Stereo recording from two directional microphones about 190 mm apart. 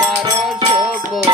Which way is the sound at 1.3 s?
25° right (ahead or behind).